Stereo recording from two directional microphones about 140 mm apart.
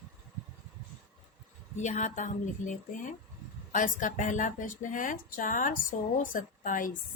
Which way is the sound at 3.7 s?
70° left (ahead or behind).